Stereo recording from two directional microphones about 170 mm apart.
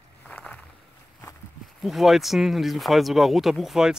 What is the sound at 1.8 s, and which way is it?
Speech, centre (ahead or behind).